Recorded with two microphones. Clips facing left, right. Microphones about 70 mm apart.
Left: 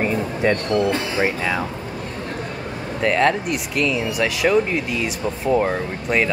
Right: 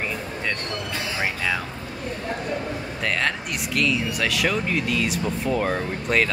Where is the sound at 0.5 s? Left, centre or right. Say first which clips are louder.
Left 12 dB; left.